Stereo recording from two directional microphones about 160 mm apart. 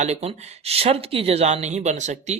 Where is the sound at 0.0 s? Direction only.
45° right (ahead or behind).